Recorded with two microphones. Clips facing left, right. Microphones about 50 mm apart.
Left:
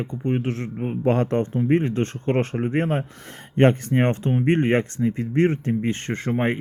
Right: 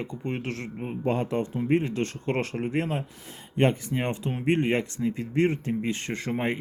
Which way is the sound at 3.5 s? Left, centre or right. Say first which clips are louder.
Left 6 dB; left.